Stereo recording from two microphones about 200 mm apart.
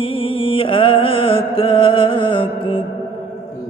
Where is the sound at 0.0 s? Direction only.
25° left (ahead or behind).